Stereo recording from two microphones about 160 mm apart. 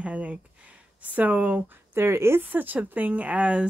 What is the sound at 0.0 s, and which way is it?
Speech, 10° right (ahead or behind).